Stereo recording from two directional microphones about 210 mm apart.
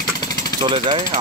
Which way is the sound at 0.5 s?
25° right (ahead or behind).